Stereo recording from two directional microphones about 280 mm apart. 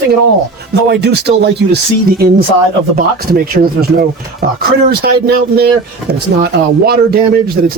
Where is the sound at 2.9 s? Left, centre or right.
Right.